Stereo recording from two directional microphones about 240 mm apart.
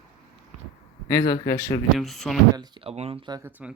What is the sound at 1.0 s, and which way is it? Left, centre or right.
Speech, centre.